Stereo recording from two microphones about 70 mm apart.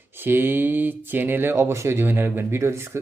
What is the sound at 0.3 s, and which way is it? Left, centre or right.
Speech, right.